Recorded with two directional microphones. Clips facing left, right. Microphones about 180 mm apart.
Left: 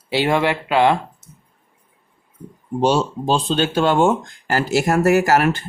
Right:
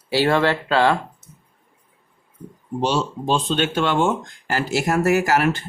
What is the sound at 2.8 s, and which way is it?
Speech, 40° left (ahead or behind).